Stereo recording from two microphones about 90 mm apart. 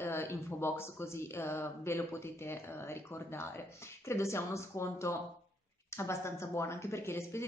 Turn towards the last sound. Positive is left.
turn(degrees=30)  # may be behind; listen again after turning